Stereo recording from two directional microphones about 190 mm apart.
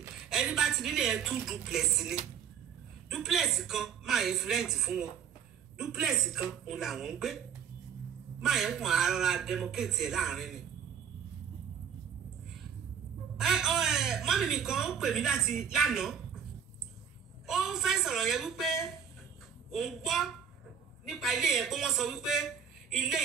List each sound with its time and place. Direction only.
0.3 s a man's voice: 5° right (ahead or behind)
13.4 s a man's voice: centre (ahead or behind)
17.5 s a man's voice: 5° right (ahead or behind)